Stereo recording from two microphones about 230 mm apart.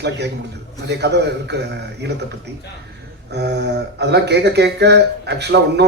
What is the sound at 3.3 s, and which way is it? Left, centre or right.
Speech, right.